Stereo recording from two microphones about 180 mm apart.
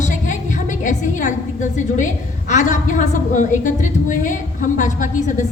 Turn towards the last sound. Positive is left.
turn(degrees=45)  # may be behind; listen again after turning